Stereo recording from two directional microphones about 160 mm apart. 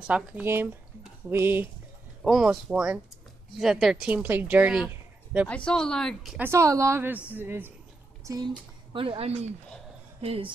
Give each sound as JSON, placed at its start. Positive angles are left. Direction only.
{"t": 0.0, "sound": "speech", "side_deg": -5}
{"t": 2.2, "sound": "speech", "side_deg": 0}
{"t": 5.5, "sound": "speech", "side_deg": 5}
{"t": 6.3, "sound": "speech", "side_deg": -15}
{"t": 8.9, "sound": "speech", "side_deg": -35}